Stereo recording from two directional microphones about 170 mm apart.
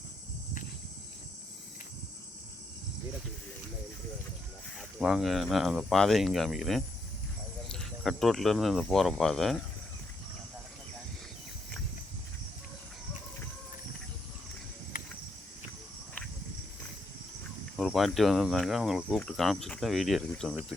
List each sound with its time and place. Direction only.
4.8 s speech: centre (ahead or behind)
14.9 s cricket: 55° left (ahead or behind)
17.7 s speech: centre (ahead or behind)